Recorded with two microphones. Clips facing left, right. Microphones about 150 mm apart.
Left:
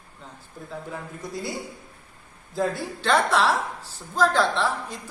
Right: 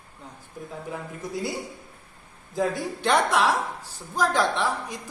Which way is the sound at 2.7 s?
15° right (ahead or behind).